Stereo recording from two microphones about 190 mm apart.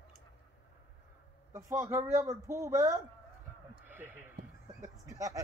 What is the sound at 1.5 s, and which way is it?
Speech, 15° right (ahead or behind).